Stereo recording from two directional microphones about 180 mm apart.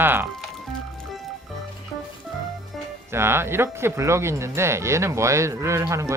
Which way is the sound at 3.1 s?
15° right (ahead or behind).